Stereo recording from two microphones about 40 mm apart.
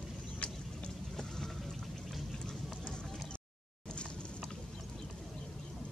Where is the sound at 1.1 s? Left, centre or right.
Centre.